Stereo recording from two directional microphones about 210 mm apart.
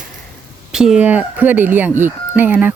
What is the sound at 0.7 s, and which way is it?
Speech, 5° right (ahead or behind).